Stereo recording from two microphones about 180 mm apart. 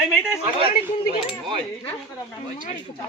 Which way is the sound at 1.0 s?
30° right (ahead or behind).